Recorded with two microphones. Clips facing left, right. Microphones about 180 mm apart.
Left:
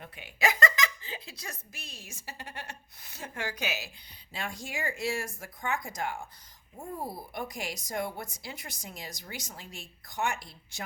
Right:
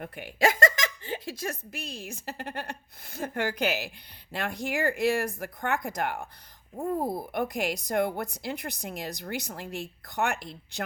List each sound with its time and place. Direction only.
0.0 s a woman's voice: 60° right (ahead or behind)